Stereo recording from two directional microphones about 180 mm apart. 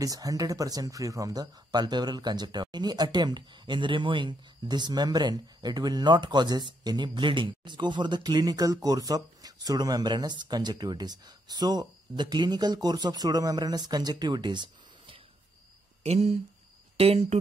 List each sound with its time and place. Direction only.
0.0 s speech: 20° right (ahead or behind)